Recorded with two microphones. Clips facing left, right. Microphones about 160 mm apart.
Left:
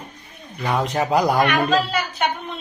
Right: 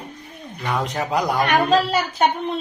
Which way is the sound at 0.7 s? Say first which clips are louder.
Left 3 dB; centre (ahead or behind).